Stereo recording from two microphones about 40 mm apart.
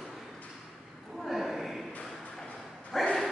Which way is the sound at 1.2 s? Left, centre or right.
Centre.